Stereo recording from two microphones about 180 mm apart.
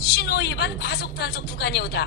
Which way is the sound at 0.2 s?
65° left (ahead or behind).